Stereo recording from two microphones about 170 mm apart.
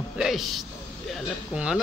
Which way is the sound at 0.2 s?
Centre (ahead or behind).